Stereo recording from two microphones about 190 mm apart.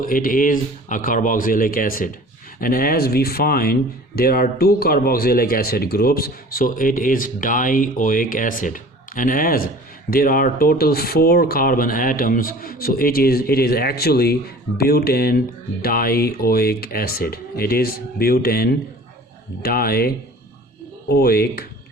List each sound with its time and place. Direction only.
0.0 s speech: 50° left (ahead or behind)